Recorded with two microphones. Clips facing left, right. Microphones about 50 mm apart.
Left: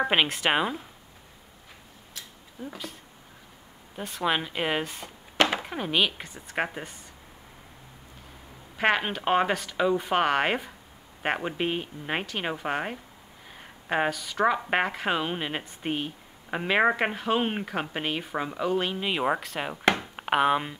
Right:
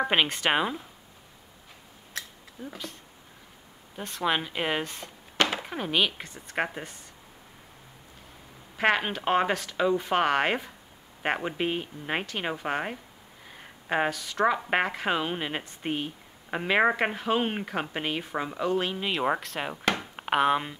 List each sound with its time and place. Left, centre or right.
0.0 s speech: centre
2.6 s speech: centre
8.7 s speech: centre
19.8 s chopping: left
20.2 s speech: centre